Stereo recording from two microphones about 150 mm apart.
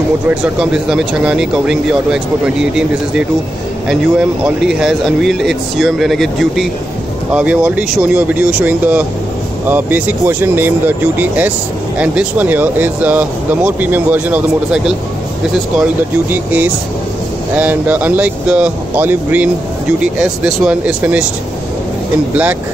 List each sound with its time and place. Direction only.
0.3 s speech: 5° right (ahead or behind)
16.3 s speech: 10° right (ahead or behind)
22.3 s speech: 10° right (ahead or behind)